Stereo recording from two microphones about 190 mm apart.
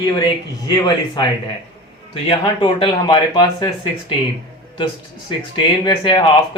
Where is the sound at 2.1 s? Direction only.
25° left (ahead or behind).